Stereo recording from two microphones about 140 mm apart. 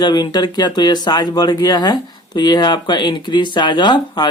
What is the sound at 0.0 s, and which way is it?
Speech, 30° left (ahead or behind).